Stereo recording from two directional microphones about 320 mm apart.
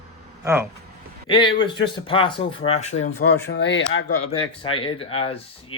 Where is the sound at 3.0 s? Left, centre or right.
Left.